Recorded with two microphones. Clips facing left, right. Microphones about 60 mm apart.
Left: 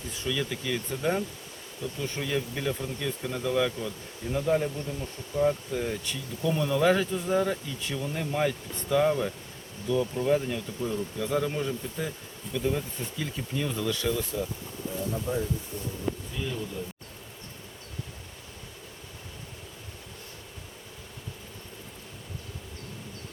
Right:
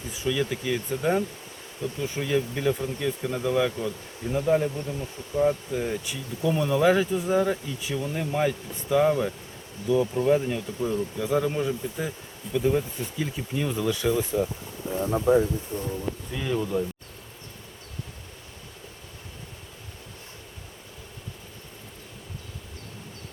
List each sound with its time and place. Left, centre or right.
0.1 s speech: centre
4.7 s speech: right
15.3 s speech: right
15.7 s speech: right
16.3 s speech: right